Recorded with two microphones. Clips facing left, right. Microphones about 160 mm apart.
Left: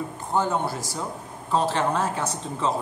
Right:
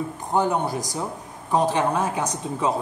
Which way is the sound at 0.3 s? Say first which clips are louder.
Right 2 dB; 15° right (ahead or behind).